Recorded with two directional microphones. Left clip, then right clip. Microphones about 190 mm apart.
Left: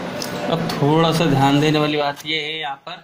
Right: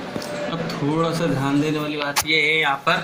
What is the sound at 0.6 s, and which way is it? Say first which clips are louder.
Speech: left 6 dB; 45° left (ahead or behind).